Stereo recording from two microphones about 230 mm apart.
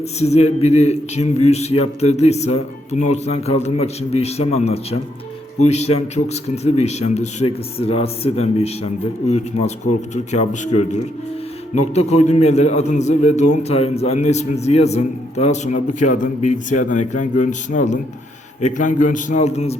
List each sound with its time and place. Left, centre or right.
0.2 s a man's voice: left